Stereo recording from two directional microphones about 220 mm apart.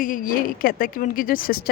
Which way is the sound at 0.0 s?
40° left (ahead or behind).